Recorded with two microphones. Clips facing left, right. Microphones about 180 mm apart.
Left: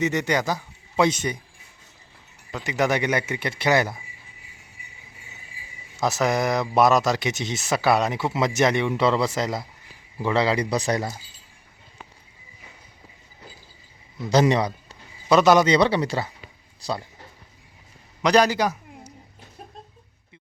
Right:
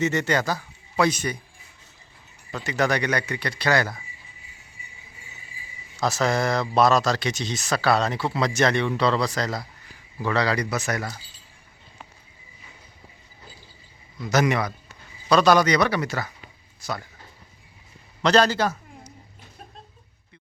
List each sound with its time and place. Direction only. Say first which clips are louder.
0.0 s speech: even; 15° left (ahead or behind)
2.6 s speech: left 1 dB; 20° left (ahead or behind)
6.0 s speech: left 1 dB; 20° left (ahead or behind)
14.2 s a man's voice: left 3 dB; 30° left (ahead or behind)
18.2 s a sound: left 1 dB; 15° left (ahead or behind)